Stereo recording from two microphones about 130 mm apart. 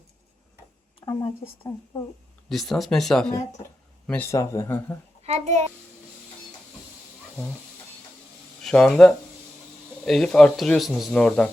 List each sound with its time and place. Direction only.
1.0 s speech: 25° left (ahead or behind)
2.5 s speech: centre (ahead or behind)
4.3 s speech: 20° left (ahead or behind)
5.2 s a child's voice: 60° right (ahead or behind)
8.6 s speech: 5° left (ahead or behind)